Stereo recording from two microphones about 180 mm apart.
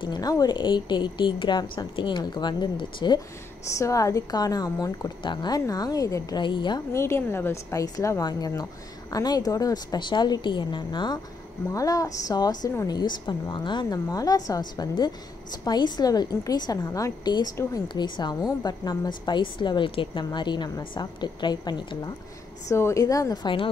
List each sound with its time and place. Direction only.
0.0 s a woman's voice: 20° left (ahead or behind)